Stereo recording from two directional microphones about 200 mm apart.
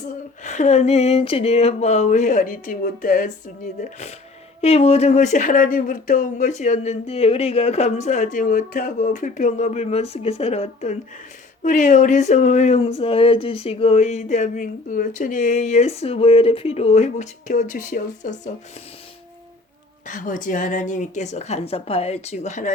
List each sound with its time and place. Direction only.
0.4 s speech: 35° left (ahead or behind)
20.1 s speech: 40° left (ahead or behind)